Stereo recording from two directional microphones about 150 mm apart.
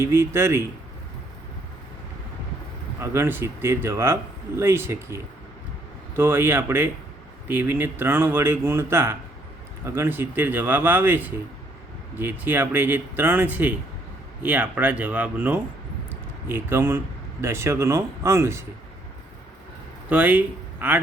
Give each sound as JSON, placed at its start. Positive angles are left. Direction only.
{"t": 0.0, "sound": "speech", "side_deg": -15}
{"t": 3.0, "sound": "speech", "side_deg": -20}
{"t": 20.1, "sound": "speech", "side_deg": -10}